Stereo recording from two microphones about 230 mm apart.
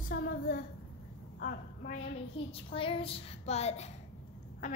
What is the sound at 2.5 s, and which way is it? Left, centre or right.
A woman's voice, left.